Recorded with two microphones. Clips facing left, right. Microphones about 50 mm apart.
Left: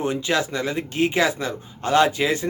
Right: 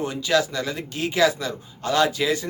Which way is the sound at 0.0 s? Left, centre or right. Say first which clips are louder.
Even; left.